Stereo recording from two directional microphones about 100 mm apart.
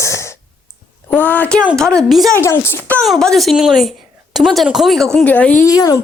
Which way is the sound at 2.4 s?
25° left (ahead or behind).